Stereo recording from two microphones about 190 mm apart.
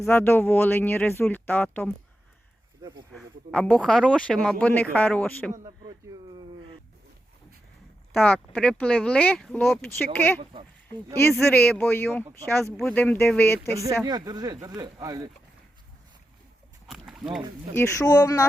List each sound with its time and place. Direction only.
0.1 s speech: 10° left (ahead or behind)
3.1 s speech: 5° left (ahead or behind)
5.6 s a sound: 20° right (ahead or behind)
8.1 s speech: 10° left (ahead or behind)
14.0 s speech: 20° right (ahead or behind)
16.9 s a sound: centre (ahead or behind)
17.7 s speech: 20° left (ahead or behind)